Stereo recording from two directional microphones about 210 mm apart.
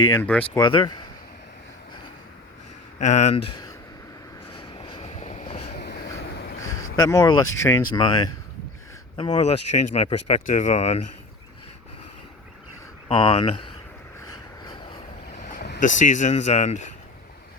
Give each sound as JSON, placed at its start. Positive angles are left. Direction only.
{"t": 0.1, "sound": "speech", "side_deg": 10}
{"t": 0.4, "sound": "speech", "side_deg": 20}
{"t": 3.0, "sound": "speech", "side_deg": 35}
{"t": 4.5, "sound": "vehicle", "side_deg": 25}
{"t": 5.7, "sound": "vehicle", "side_deg": 50}
{"t": 7.0, "sound": "speech", "side_deg": 15}
{"t": 13.1, "sound": "speech", "side_deg": 25}
{"t": 14.3, "sound": "a sound", "side_deg": 20}
{"t": 15.4, "sound": "a sound", "side_deg": 45}
{"t": 15.8, "sound": "speech", "side_deg": 35}